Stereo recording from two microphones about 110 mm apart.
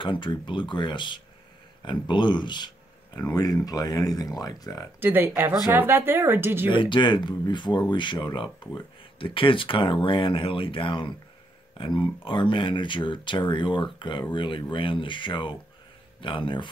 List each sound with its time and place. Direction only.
0.0 s speech: 45° left (ahead or behind)
5.0 s speech: 20° right (ahead or behind)
6.7 s speech: 45° left (ahead or behind)